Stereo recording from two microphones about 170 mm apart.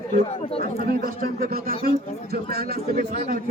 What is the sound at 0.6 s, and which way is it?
A man's voice, 60° right (ahead or behind).